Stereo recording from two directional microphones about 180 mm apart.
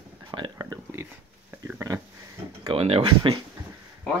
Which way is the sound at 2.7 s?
30° right (ahead or behind).